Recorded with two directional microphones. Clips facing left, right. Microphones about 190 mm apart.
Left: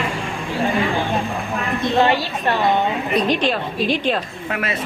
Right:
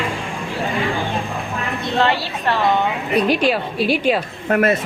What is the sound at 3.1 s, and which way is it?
A woman's voice, 10° right (ahead or behind).